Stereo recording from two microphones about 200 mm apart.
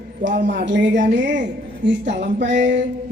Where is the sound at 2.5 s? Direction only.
40° right (ahead or behind).